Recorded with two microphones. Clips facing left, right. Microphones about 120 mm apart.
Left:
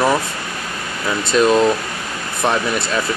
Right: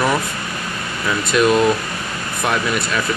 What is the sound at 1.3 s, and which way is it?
Speech, 30° left (ahead or behind).